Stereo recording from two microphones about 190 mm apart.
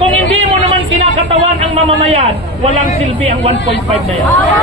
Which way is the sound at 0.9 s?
35° right (ahead or behind).